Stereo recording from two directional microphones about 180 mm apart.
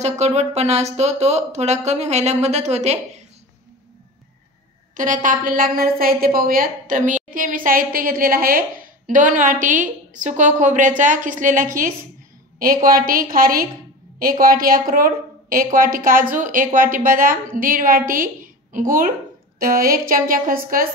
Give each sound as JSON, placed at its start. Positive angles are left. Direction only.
{"t": 0.0, "sound": "speech", "side_deg": -40}
{"t": 4.9, "sound": "a woman's voice", "side_deg": -45}